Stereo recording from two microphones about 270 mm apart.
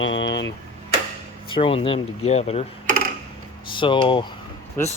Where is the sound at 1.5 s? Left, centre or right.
Centre.